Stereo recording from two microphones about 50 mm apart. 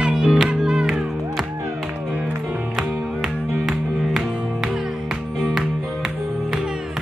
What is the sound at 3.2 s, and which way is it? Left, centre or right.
Music, centre.